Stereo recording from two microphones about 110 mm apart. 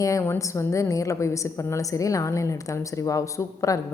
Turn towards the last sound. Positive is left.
turn(degrees=30)  # may be behind; listen again after turning